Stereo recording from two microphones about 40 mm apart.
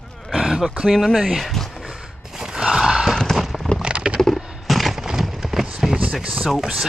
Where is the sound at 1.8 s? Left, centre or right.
Centre.